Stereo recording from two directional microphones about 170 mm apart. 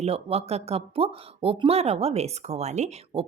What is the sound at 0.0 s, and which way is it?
Speech, 35° right (ahead or behind).